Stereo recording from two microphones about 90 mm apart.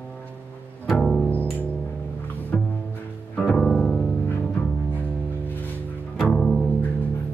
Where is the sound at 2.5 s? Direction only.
5° left (ahead or behind).